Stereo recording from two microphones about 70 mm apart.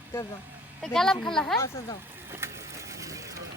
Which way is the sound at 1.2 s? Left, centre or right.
Centre.